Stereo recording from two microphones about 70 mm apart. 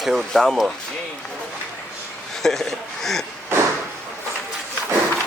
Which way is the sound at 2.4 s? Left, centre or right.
Centre.